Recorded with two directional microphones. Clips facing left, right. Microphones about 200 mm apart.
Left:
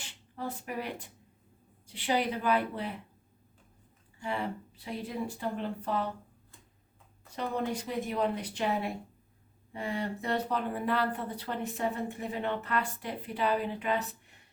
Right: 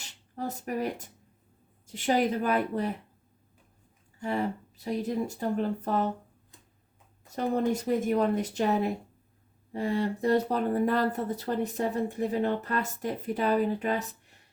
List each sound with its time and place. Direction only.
0.0 s speech: 40° right (ahead or behind)
4.2 s speech: 40° right (ahead or behind)
7.3 s speech: 45° right (ahead or behind)